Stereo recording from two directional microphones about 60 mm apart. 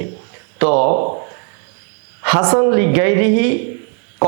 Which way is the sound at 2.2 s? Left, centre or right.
Right.